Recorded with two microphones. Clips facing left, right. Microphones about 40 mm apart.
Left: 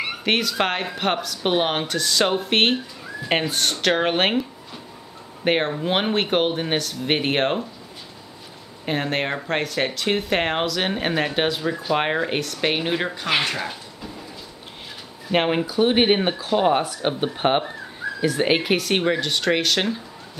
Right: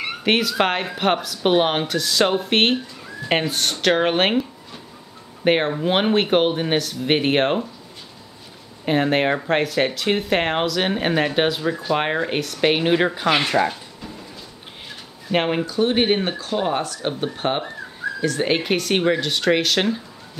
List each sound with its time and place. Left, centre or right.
0.0 s speech: centre
8.8 s speech: centre
15.2 s speech: centre